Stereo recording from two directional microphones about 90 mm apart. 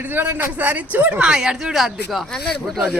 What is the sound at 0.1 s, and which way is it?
Speech, 20° right (ahead or behind).